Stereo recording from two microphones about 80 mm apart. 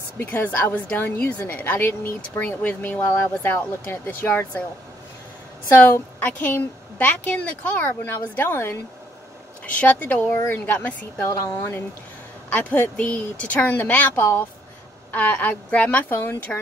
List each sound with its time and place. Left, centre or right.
0.2 s a woman's voice: left
5.8 s a woman's voice: left
10.7 s a woman's voice: centre
12.5 s a woman's voice: centre
15.0 s a woman's voice: centre
16.1 s a woman's voice: left